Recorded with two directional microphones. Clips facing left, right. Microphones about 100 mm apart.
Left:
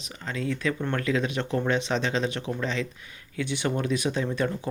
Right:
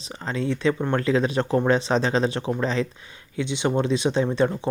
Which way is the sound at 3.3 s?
20° right (ahead or behind).